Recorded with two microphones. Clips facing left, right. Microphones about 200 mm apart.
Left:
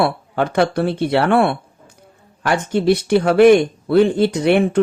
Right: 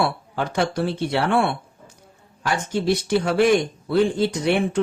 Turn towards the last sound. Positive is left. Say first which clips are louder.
# left 6 dB
turn(degrees=60)  # may be behind; listen again after turning